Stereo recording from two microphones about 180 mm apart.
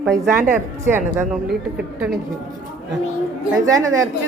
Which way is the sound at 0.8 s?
15° right (ahead or behind).